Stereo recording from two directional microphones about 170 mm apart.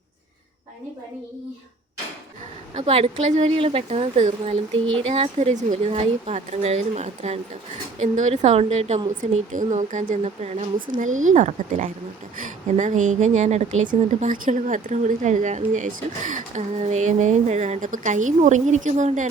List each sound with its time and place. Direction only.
2.7 s speech: 40° right (ahead or behind)